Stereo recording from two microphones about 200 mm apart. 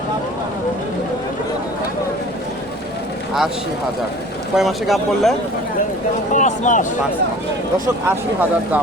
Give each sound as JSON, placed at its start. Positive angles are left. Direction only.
{"t": 4.5, "sound": "speech", "side_deg": 0}
{"t": 6.3, "sound": "speech", "side_deg": 40}
{"t": 8.0, "sound": "speech", "side_deg": -10}